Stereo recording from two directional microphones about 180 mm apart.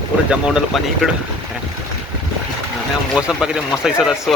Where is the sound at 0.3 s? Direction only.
5° right (ahead or behind).